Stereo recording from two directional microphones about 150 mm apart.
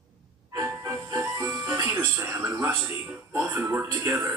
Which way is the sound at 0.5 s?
20° right (ahead or behind).